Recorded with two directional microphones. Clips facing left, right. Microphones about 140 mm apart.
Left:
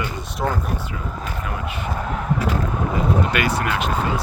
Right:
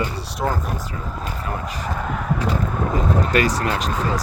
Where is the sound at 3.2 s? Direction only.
35° right (ahead or behind).